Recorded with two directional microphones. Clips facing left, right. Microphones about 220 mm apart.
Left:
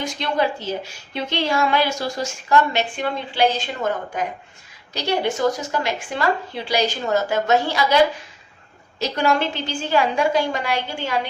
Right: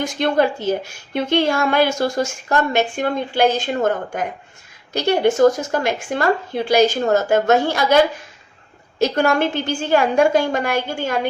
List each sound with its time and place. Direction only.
0.0 s a woman's voice: 50° right (ahead or behind)